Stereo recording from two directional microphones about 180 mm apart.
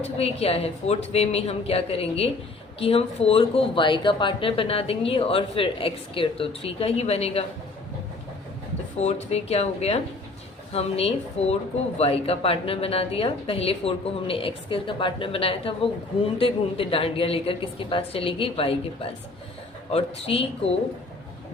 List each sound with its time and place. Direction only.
0.0 s speech: 35° left (ahead or behind)
9.0 s speech: 40° left (ahead or behind)
19.9 s speech: 35° left (ahead or behind)